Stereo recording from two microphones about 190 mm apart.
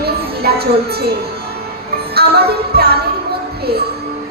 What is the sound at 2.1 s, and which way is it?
Music, 55° right (ahead or behind).